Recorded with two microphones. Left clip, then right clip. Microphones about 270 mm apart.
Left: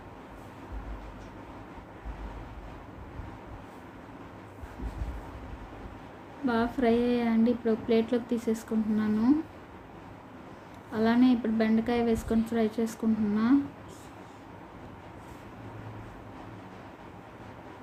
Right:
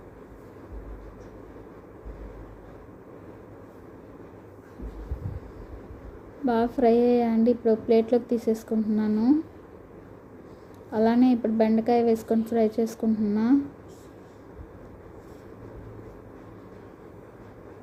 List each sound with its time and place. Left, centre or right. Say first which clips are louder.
6.4 s speech: right 5 dB; centre
10.9 s speech: right 3 dB; centre